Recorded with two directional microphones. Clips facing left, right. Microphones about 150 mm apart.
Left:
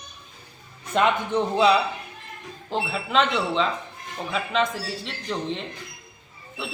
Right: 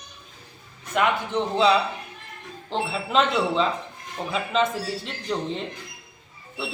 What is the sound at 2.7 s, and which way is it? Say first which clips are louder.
A woman's voice: even; 5° left (ahead or behind).